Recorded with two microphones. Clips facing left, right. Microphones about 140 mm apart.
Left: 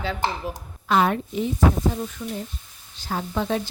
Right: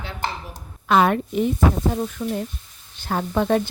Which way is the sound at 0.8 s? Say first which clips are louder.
Right 3 dB; 65° right (ahead or behind).